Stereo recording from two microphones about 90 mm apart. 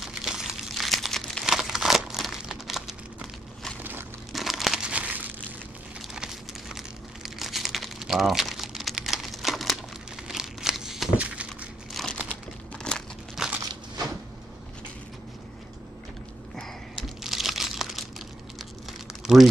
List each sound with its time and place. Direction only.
0.0 s crumpling: 5° right (ahead or behind)
6.1 s crumpling: 5° right (ahead or behind)
11.1 s a sound: 15° right (ahead or behind)
11.9 s crumpling: 5° left (ahead or behind)
12.3 s computer keyboard: 10° left (ahead or behind)
13.4 s a sound: 5° right (ahead or behind)
17.2 s crumpling: 5° right (ahead or behind)